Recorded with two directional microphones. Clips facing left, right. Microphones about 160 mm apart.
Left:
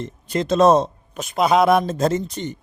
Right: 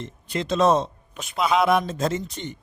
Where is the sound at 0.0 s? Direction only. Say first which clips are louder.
Left 5 dB; 40° left (ahead or behind).